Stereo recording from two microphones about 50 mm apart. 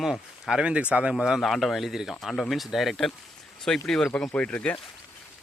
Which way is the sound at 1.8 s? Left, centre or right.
Centre.